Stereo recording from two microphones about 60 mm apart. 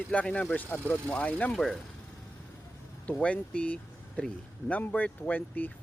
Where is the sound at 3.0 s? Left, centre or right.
Left.